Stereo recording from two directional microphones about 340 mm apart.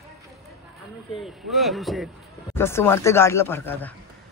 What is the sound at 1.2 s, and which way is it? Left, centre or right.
A man's voice, centre.